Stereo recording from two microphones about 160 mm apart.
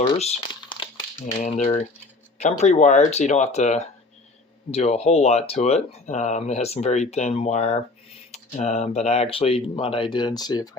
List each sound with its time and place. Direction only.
0.2 s crumpling: 35° left (ahead or behind)
1.4 s speech: 45° left (ahead or behind); by 10.7 s 25° left (ahead or behind)